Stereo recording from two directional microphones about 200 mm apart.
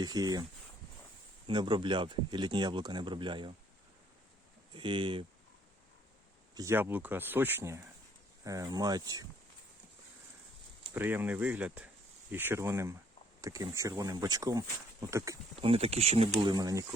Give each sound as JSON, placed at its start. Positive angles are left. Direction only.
{"t": 0.0, "sound": "speech", "side_deg": -20}
{"t": 1.5, "sound": "speech", "side_deg": -25}
{"t": 4.7, "sound": "speech", "side_deg": -25}
{"t": 6.5, "sound": "speech", "side_deg": -15}
{"t": 10.9, "sound": "speech", "side_deg": -10}
{"t": 15.5, "sound": "speech", "side_deg": -30}
{"t": 16.6, "sound": "speech", "side_deg": -15}